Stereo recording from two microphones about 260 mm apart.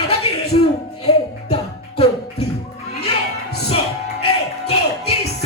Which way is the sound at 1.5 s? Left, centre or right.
Left.